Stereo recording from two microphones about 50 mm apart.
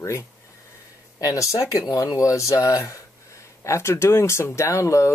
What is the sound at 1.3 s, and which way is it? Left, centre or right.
Speech, left.